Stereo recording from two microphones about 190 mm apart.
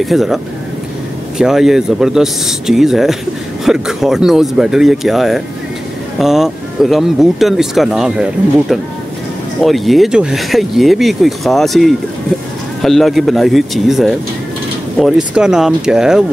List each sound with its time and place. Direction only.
0.0 s speech: centre (ahead or behind)
1.4 s speech: centre (ahead or behind)